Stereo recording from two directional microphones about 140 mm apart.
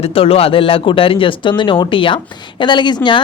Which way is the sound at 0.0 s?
45° left (ahead or behind).